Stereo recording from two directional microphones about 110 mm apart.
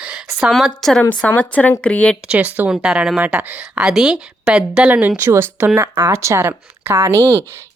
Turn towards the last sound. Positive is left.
turn(degrees=-25)  # may be behind; listen again after turning